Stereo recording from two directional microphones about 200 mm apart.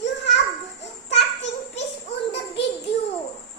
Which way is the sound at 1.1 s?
60° left (ahead or behind).